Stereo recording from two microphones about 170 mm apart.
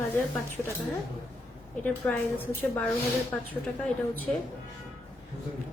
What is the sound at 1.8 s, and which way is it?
A woman's voice, 10° left (ahead or behind).